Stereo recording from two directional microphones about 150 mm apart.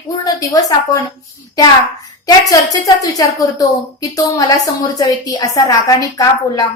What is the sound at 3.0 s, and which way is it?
A woman's voice, 25° left (ahead or behind).